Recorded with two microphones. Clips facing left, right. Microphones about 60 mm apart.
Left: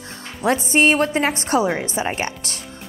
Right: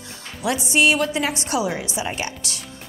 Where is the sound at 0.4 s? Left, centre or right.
Left.